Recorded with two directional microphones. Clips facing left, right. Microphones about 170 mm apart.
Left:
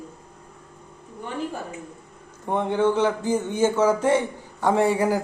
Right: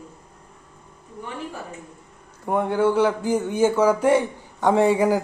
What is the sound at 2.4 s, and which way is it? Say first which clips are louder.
Speech: right 1 dB; 10° right (ahead or behind).